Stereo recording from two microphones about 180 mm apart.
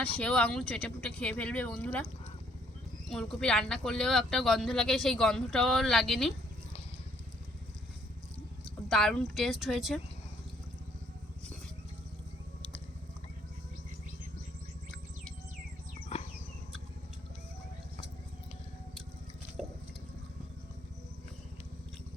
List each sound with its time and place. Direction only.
0.0 s speech: 5° left (ahead or behind)
3.1 s speech: 5° left (ahead or behind)
8.6 s speech: centre (ahead or behind)
16.1 s a sound: 35° left (ahead or behind)
19.6 s water: centre (ahead or behind)